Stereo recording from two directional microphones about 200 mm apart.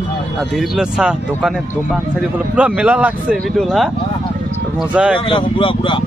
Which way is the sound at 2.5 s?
5° right (ahead or behind).